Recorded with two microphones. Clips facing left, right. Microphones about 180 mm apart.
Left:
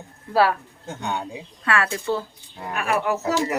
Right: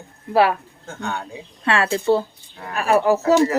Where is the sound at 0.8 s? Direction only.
20° left (ahead or behind).